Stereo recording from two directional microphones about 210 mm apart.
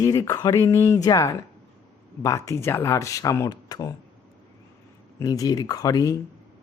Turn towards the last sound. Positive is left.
turn(degrees=15)  # may be behind; listen again after turning